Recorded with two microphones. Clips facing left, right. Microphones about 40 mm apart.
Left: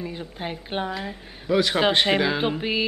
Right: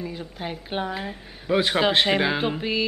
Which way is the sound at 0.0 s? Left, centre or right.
Centre.